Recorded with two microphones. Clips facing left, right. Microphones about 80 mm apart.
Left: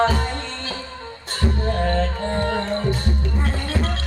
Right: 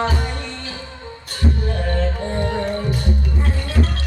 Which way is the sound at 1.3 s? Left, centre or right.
Left.